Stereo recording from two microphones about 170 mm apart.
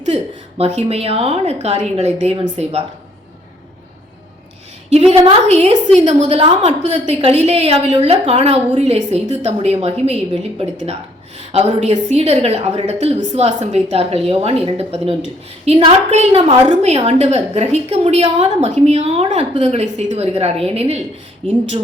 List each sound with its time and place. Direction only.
0.8 s a woman's voice: 35° right (ahead or behind)
4.9 s a woman's voice: 35° right (ahead or behind)
11.5 s a woman's voice: 35° right (ahead or behind)